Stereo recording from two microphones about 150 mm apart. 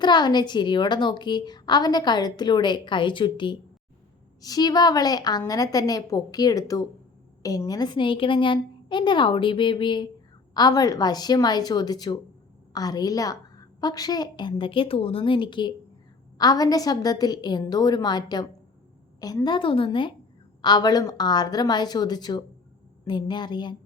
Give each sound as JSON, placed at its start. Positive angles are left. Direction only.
{"t": 0.0, "sound": "a woman's voice", "side_deg": 30}